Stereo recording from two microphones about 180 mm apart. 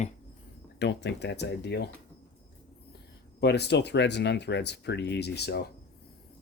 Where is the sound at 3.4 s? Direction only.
70° left (ahead or behind).